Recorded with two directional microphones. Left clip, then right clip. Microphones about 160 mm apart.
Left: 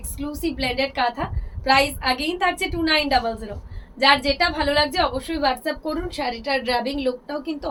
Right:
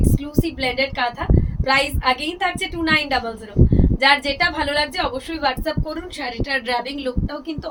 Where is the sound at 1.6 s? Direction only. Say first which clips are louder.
Even; 20° right (ahead or behind).